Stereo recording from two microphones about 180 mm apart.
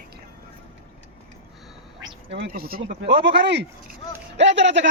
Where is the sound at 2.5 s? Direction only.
55° right (ahead or behind).